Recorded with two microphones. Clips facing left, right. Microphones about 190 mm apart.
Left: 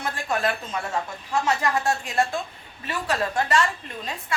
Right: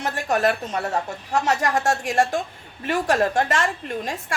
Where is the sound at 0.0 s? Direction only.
40° right (ahead or behind).